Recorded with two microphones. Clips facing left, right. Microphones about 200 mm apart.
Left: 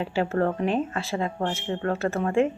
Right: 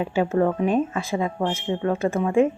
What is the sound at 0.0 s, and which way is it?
Speech, 15° right (ahead or behind).